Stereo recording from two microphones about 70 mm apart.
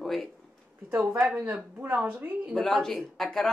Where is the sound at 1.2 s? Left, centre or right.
Centre.